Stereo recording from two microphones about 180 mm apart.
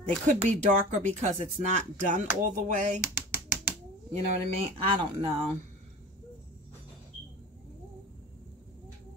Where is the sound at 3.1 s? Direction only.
10° right (ahead or behind).